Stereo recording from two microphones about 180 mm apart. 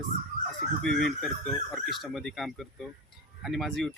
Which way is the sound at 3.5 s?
Centre (ahead or behind).